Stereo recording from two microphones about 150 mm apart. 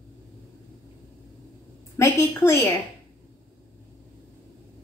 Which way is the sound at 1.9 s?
15° left (ahead or behind).